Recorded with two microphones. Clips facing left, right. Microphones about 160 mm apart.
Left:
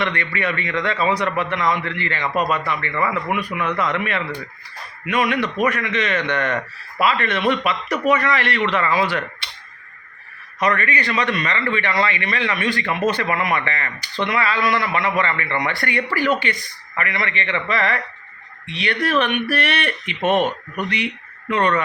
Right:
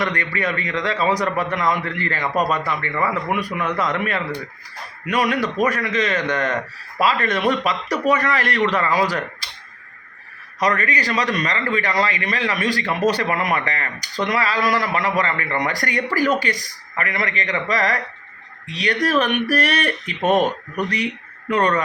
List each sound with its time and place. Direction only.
0.0 s speech: 40° right (ahead or behind)
10.6 s speech: 35° right (ahead or behind)